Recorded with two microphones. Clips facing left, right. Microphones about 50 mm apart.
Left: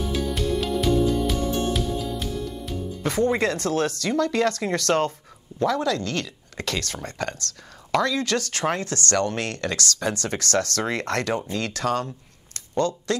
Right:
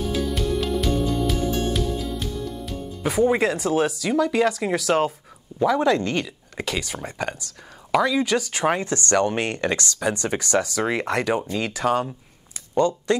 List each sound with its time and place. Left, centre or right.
0.1 s music: centre
5.8 s speech: right
12.5 s a sound: centre